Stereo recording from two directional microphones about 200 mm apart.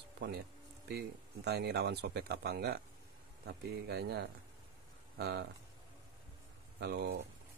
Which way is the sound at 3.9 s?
55° right (ahead or behind).